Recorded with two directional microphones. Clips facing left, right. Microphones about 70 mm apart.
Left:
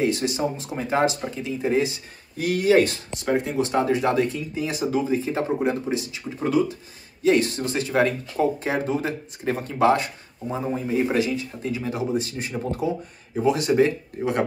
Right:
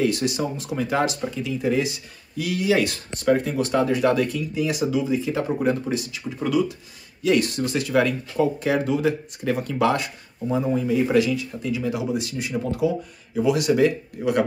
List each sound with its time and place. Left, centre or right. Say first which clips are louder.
0.0 s speech: even; left
3.2 s speech: right 2 dB; centre
5.6 s speech: right 1 dB; left